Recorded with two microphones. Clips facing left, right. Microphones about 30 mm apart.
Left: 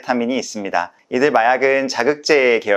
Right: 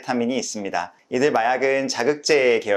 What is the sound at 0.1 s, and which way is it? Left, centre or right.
Speech, centre.